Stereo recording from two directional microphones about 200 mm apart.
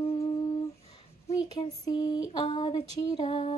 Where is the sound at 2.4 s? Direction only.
30° left (ahead or behind).